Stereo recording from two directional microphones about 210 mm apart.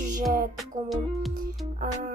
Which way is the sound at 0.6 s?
Centre (ahead or behind).